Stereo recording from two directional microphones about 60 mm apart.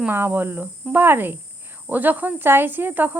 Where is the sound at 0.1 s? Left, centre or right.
Right.